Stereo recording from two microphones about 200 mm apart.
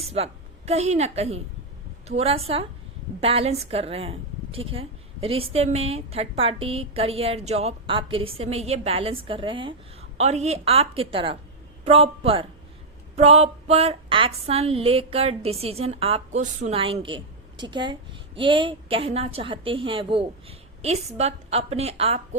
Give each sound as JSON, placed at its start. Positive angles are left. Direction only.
{"t": 0.0, "sound": "a woman's voice", "side_deg": -30}